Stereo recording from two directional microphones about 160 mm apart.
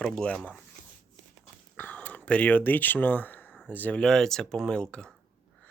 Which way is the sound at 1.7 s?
10° left (ahead or behind).